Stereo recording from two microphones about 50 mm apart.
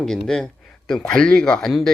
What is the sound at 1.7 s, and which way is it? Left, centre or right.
Speech, centre.